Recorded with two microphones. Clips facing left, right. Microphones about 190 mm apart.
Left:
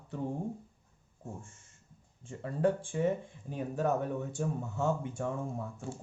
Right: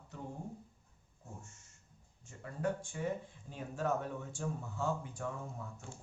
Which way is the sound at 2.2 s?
30° left (ahead or behind).